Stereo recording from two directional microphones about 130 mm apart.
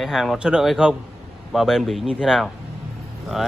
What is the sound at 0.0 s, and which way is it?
Speech, centre (ahead or behind).